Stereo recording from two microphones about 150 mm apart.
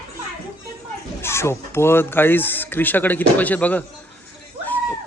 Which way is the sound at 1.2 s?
15° left (ahead or behind).